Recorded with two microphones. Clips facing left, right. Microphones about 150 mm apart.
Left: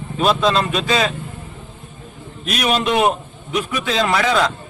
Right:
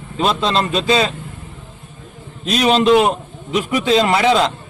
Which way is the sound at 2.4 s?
25° right (ahead or behind).